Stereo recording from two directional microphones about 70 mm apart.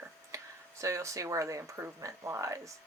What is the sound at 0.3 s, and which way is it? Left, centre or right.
Speech, right.